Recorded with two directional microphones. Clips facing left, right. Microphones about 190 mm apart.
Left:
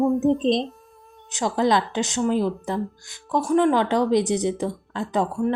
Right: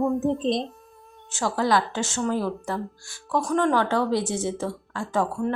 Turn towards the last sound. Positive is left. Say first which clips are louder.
# left 2 dB
turn(degrees=20)  # may be behind; listen again after turning